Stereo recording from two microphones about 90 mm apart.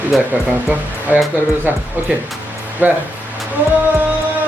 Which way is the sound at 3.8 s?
20° right (ahead or behind).